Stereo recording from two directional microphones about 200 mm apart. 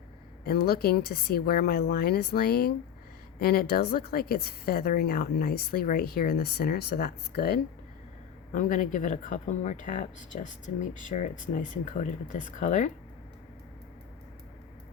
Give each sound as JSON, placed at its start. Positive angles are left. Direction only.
{"t": 0.4, "sound": "a woman's voice", "side_deg": 50}
{"t": 8.5, "sound": "speech", "side_deg": 40}